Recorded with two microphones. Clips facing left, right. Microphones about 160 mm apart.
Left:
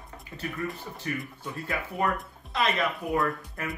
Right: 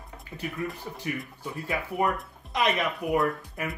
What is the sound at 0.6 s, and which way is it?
Speech, centre (ahead or behind).